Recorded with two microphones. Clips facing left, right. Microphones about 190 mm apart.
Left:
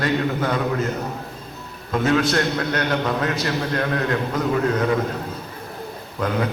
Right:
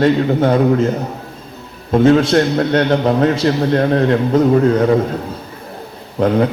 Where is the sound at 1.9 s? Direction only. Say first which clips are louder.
Right 9 dB; 30° right (ahead or behind).